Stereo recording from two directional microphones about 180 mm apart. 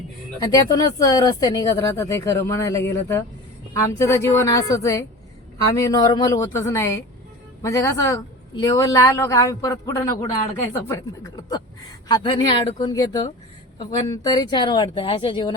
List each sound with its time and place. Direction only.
0.5 s speech: 20° left (ahead or behind)